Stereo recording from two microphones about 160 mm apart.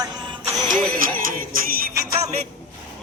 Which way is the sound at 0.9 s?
60° right (ahead or behind).